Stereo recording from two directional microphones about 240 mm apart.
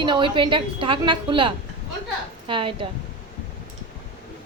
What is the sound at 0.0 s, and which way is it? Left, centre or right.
A woman's voice, centre.